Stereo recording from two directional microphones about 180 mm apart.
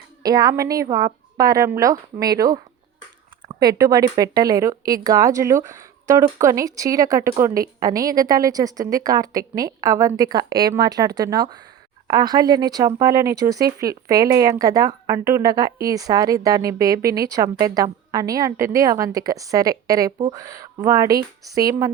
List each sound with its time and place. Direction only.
0.2 s speech: 20° right (ahead or behind)